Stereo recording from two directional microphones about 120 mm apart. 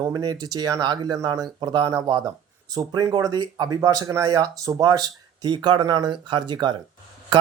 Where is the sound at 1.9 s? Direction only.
25° right (ahead or behind).